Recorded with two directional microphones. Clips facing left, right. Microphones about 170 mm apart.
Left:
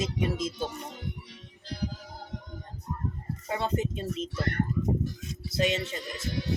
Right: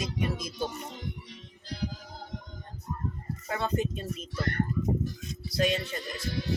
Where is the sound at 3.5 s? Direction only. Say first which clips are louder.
Even; 25° left (ahead or behind).